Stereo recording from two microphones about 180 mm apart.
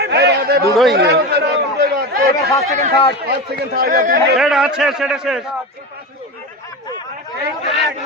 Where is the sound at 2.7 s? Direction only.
40° right (ahead or behind).